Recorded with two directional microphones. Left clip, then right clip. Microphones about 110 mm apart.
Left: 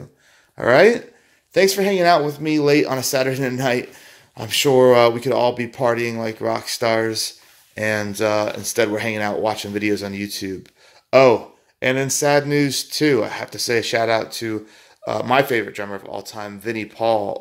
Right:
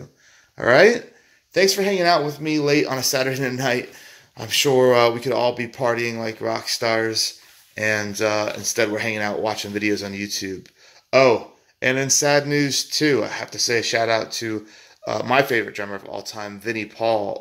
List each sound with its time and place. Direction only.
0.6 s speech: 15° left (ahead or behind)
1.5 s speech: 35° left (ahead or behind); by 2.9 s 50° left (ahead or behind)
2.9 s speech: 30° left (ahead or behind)
11.1 s speech: 40° left (ahead or behind)
11.8 s speech: 20° left (ahead or behind)
14.0 s speech: 15° left (ahead or behind)